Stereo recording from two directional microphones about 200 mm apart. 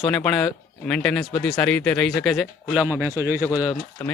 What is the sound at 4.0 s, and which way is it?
Speech, 10° left (ahead or behind).